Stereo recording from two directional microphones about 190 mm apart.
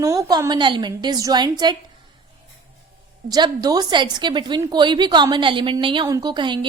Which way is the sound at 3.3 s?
20° right (ahead or behind).